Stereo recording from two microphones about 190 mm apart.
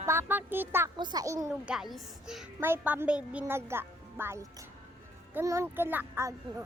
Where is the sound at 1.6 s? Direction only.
5° right (ahead or behind).